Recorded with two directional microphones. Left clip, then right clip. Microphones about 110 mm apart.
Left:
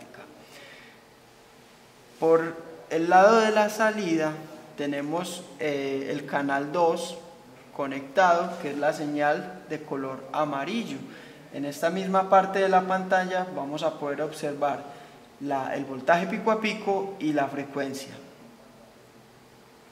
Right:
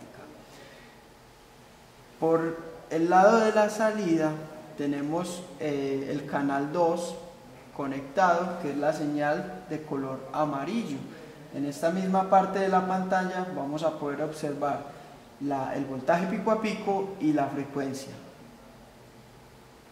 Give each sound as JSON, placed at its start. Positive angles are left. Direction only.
{"t": 2.1, "sound": "a man's voice", "side_deg": 35}
{"t": 2.9, "sound": "speech", "side_deg": 25}